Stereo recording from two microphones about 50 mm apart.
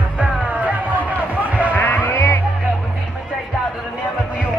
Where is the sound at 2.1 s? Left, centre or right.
Left.